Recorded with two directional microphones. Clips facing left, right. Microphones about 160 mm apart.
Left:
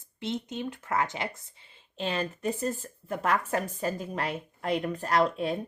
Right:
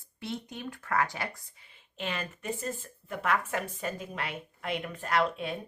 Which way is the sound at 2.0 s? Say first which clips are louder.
Left 6 dB; 35° left (ahead or behind).